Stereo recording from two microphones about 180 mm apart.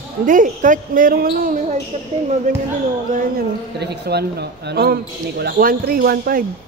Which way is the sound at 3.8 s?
65° right (ahead or behind).